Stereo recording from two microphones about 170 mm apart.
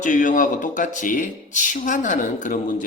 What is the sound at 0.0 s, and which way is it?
Speech, 50° left (ahead or behind).